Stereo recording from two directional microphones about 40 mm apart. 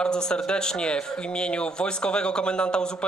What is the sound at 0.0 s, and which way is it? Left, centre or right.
Speech, left.